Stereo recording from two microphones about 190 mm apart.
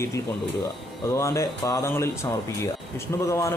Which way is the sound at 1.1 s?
15° left (ahead or behind).